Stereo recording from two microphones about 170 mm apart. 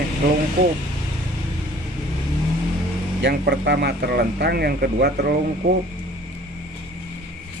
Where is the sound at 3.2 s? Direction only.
75° right (ahead or behind).